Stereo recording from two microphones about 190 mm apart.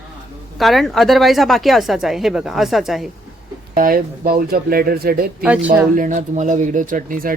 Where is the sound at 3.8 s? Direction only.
45° right (ahead or behind).